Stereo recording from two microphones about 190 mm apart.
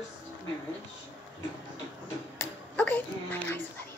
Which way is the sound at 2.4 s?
10° left (ahead or behind).